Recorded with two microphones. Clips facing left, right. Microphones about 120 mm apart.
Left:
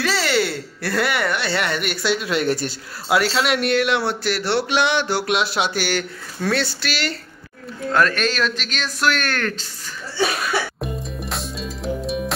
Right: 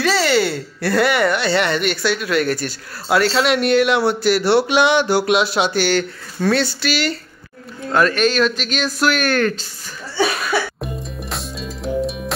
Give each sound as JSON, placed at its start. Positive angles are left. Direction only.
{"t": 0.0, "sound": "speech", "side_deg": 0}
{"t": 2.1, "sound": "speech", "side_deg": 25}
{"t": 3.1, "sound": "speech", "side_deg": 5}
{"t": 10.8, "sound": "music", "side_deg": 0}